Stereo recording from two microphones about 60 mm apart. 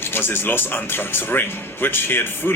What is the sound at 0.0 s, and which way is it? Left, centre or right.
Speech, left.